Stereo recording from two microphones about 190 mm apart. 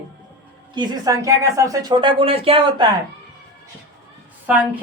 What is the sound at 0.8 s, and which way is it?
A woman's voice, 20° right (ahead or behind).